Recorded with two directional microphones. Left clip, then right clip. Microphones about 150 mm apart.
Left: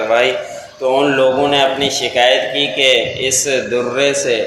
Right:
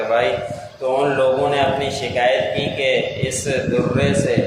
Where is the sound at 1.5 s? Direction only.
35° left (ahead or behind).